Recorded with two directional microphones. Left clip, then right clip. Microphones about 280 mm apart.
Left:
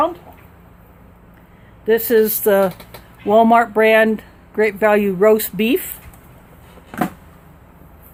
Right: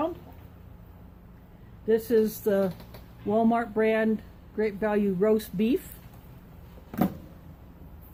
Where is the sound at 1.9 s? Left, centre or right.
Left.